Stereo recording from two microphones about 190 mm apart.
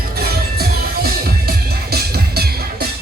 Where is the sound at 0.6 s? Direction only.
55° right (ahead or behind).